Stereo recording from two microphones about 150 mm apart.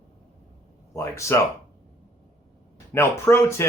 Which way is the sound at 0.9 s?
20° left (ahead or behind).